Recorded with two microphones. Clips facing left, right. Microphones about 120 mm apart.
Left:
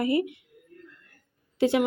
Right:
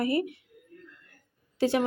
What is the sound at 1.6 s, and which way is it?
Speech, 20° left (ahead or behind).